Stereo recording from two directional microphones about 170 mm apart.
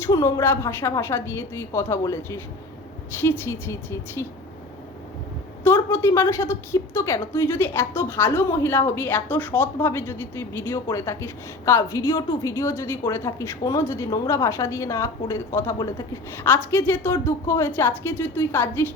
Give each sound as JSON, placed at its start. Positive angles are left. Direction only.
{"t": 0.0, "sound": "a woman's voice", "side_deg": 15}
{"t": 5.6, "sound": "a woman's voice", "side_deg": 15}